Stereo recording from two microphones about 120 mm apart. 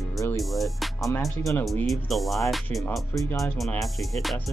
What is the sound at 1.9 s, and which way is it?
Music, centre (ahead or behind).